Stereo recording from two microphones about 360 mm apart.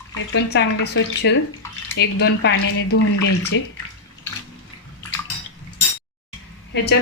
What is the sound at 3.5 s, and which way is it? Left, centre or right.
Speech, left.